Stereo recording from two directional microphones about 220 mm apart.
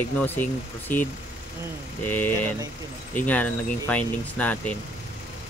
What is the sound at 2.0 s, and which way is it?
Speech, 10° left (ahead or behind).